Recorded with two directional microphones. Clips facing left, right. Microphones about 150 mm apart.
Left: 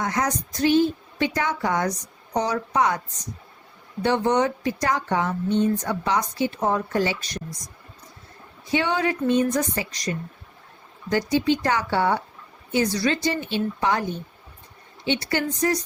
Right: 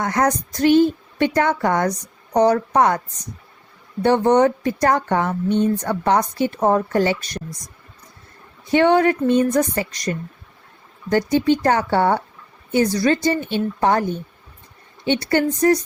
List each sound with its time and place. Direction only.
0.0 s speech: 55° right (ahead or behind)
4.0 s speech: 50° right (ahead or behind)
8.7 s speech: 50° right (ahead or behind)
15.0 s speech: 50° right (ahead or behind)